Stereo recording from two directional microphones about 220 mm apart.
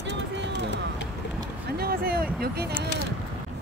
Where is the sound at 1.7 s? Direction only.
45° right (ahead or behind).